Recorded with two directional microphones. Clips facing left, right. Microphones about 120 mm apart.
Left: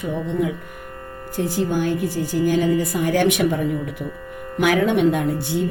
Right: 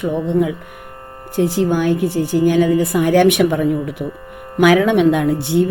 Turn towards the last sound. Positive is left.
turn(degrees=-80)